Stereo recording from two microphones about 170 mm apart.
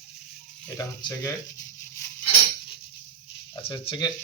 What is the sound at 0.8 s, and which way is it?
Speech, 20° left (ahead or behind).